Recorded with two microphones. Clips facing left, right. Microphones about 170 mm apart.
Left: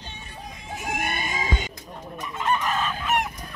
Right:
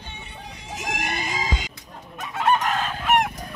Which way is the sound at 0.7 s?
90° right.